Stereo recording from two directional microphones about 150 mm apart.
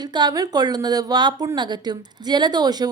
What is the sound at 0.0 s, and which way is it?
Speech, 30° right (ahead or behind).